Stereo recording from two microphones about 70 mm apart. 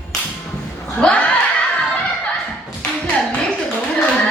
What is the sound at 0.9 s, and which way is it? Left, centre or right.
Chuckle, centre.